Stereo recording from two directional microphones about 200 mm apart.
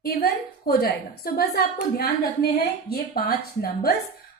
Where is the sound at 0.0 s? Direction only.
50° left (ahead or behind).